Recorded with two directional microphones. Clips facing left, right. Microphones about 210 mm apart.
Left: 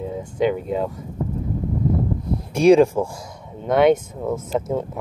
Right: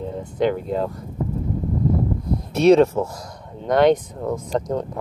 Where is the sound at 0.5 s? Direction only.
5° left (ahead or behind).